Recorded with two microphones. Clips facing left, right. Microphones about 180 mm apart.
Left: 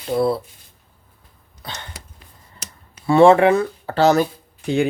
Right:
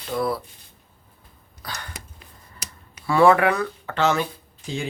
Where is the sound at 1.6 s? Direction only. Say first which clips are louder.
Left 1 dB; 25° left (ahead or behind).